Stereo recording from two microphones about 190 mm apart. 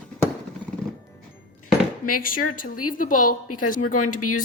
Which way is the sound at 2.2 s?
45° left (ahead or behind).